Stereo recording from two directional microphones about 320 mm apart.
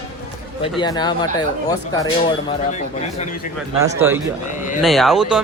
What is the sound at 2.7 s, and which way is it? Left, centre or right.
Speech, left.